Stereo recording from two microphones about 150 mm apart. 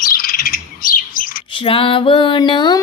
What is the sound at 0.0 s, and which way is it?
Bird, 75° left (ahead or behind).